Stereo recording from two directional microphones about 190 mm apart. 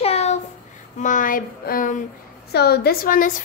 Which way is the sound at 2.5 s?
55° left (ahead or behind).